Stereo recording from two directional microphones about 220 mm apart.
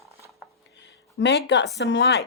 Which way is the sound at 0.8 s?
55° left (ahead or behind).